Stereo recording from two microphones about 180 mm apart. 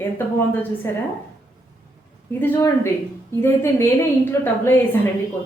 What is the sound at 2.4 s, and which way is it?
A woman's voice, 15° left (ahead or behind).